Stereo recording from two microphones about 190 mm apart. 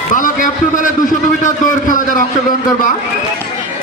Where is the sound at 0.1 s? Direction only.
45° left (ahead or behind).